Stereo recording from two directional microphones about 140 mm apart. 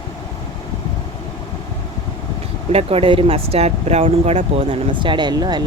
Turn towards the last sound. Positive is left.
turn(degrees=-30)  # may be behind; listen again after turning